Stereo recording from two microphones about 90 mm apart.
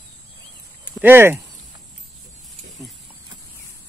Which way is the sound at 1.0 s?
25° right (ahead or behind).